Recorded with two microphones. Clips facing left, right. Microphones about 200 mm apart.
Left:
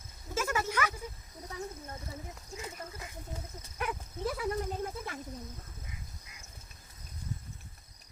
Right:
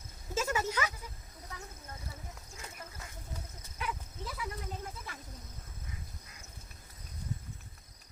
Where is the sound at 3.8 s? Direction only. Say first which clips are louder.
Left 3 dB; 55° left (ahead or behind).